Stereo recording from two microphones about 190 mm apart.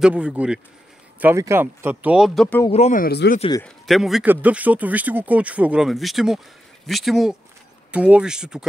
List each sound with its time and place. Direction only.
0.0 s speech: 5° right (ahead or behind)
2.7 s speech: 35° left (ahead or behind)
3.0 s speech: 55° left (ahead or behind)
3.3 s speech: 25° left (ahead or behind)
3.6 s speech: centre (ahead or behind)